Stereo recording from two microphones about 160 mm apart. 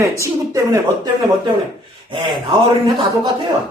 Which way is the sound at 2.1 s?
30° right (ahead or behind).